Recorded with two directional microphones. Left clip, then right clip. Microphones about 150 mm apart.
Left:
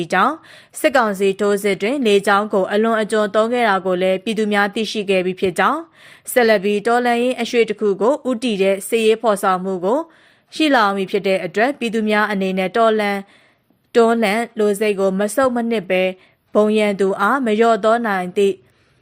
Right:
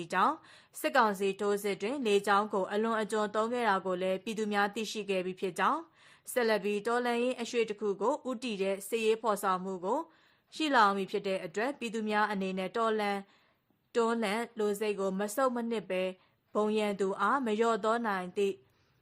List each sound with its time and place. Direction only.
0.0 s a woman's voice: 20° left (ahead or behind)